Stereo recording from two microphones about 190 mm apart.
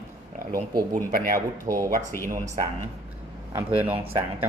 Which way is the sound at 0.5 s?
45° right (ahead or behind).